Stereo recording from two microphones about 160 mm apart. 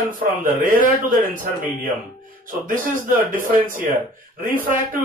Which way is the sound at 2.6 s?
60° right (ahead or behind).